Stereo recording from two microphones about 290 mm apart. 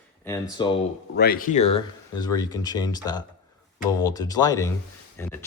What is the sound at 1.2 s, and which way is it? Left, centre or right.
Speech, left.